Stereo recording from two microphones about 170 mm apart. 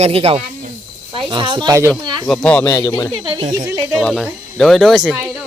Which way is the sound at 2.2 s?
5° left (ahead or behind).